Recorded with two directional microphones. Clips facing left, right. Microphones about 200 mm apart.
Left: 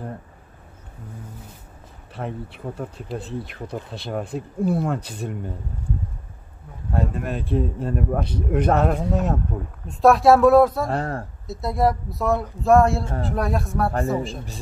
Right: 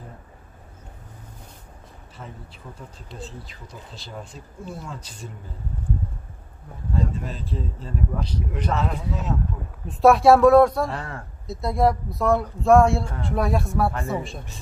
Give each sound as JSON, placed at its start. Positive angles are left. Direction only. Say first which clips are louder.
{"t": 2.1, "sound": "speech", "louder": "left 11 dB", "side_deg": 65}
{"t": 6.9, "sound": "speech", "louder": "left 3 dB", "side_deg": 60}
{"t": 9.8, "sound": "speech", "louder": "even", "side_deg": 0}
{"t": 10.9, "sound": "speech", "louder": "left 7 dB", "side_deg": 40}
{"t": 11.4, "sound": "speech", "louder": "right 1 dB", "side_deg": 0}